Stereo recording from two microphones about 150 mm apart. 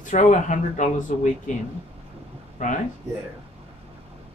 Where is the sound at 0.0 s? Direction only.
55° left (ahead or behind).